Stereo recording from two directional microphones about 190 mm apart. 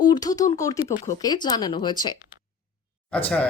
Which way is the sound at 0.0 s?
20° left (ahead or behind).